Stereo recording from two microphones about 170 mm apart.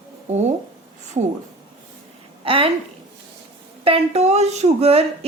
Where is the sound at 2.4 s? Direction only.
35° right (ahead or behind).